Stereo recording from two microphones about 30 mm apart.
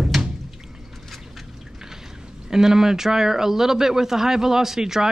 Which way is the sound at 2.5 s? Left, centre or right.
Centre.